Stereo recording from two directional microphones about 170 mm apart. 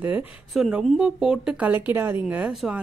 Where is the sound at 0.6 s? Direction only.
Centre (ahead or behind).